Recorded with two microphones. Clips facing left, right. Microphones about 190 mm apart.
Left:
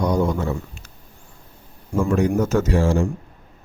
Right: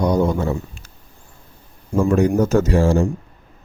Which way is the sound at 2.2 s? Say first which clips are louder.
Right 3 dB; 35° right (ahead or behind).